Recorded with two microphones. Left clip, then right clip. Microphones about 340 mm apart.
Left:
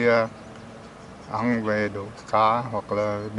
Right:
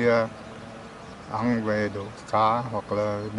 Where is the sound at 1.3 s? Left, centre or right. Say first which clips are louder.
Left 1 dB; centre.